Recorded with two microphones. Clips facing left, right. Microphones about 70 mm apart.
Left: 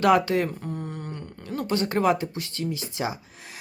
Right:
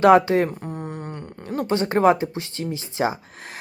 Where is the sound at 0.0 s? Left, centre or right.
Right.